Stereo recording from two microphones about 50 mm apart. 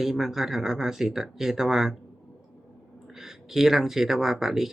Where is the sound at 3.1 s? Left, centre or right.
Centre.